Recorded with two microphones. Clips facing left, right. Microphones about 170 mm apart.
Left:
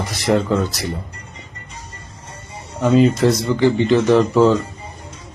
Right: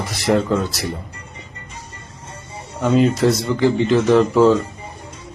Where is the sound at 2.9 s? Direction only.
5° right (ahead or behind).